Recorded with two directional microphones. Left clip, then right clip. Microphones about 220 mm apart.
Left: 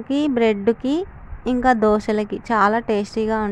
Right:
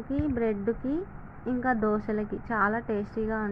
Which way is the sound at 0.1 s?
90° left.